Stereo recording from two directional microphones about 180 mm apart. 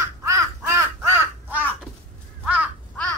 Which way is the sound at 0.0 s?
15° right (ahead or behind).